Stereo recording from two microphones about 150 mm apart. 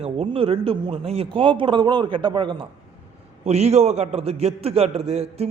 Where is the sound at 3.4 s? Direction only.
45° right (ahead or behind).